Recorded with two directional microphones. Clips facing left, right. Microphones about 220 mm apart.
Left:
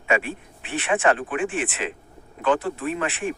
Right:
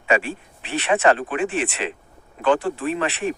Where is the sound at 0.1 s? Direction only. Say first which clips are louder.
Right 2 dB; 30° right (ahead or behind).